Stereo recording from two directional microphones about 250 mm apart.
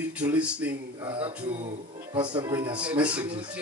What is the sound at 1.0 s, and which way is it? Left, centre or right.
Speech, right.